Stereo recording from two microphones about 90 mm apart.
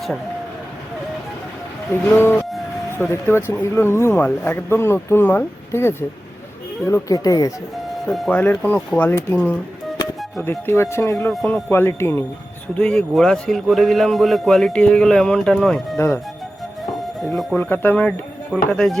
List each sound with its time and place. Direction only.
1.9 s speech: 25° left (ahead or behind); by 7.5 s 40° left (ahead or behind)
8.3 s speech: 20° left (ahead or behind)
10.4 s speech: 30° left (ahead or behind)
12.7 s a man's voice: 10° left (ahead or behind)
16.0 s speech: 30° left (ahead or behind)
17.6 s speech: 20° left (ahead or behind)
18.5 s speech: 5° right (ahead or behind)